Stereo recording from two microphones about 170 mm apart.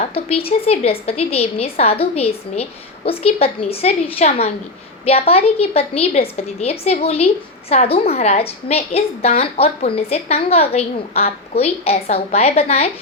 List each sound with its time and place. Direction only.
0.0 s a woman's voice: 35° left (ahead or behind)